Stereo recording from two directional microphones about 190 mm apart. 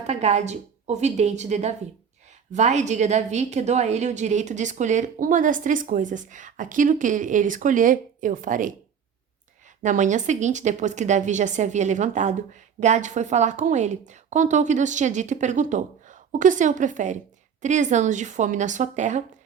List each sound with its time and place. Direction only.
0.1 s a woman's voice: 35° right (ahead or behind)
9.8 s a woman's voice: 40° right (ahead or behind)